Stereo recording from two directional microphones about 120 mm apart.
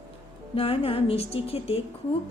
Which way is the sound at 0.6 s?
50° left (ahead or behind).